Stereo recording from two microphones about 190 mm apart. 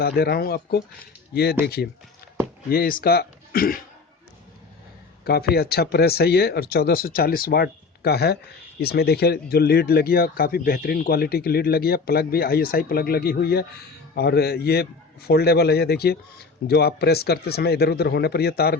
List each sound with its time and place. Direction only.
0.0 s speech: 55° left (ahead or behind)
5.2 s speech: 55° left (ahead or behind)